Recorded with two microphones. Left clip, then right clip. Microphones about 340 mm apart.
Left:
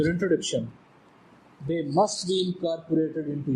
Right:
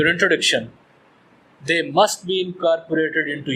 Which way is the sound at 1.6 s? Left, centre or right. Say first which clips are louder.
Right 7 dB; right.